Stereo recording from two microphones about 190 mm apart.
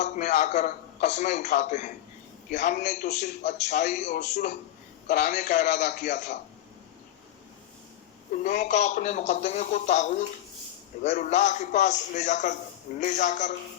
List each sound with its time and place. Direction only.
0.0 s a man's voice: 40° left (ahead or behind)
8.4 s a man's voice: 40° left (ahead or behind)